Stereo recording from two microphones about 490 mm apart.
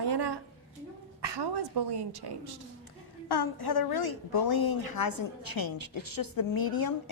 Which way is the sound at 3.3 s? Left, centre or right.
Left.